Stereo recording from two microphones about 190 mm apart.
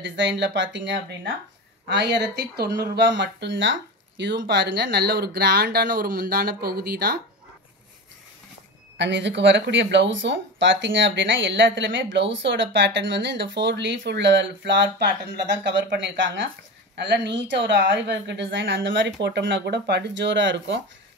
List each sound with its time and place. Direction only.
0.0 s speech: 70° right (ahead or behind); by 7.2 s 55° right (ahead or behind)
8.9 s speech: 70° right (ahead or behind)